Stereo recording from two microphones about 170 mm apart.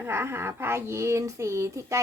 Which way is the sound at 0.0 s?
15° right (ahead or behind).